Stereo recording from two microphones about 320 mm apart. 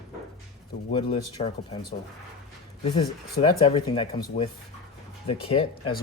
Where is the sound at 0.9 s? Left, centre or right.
Centre.